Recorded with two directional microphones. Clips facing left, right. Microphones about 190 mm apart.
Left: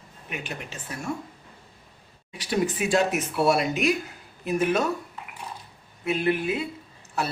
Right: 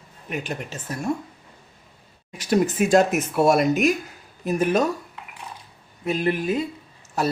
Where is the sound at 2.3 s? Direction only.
45° right (ahead or behind).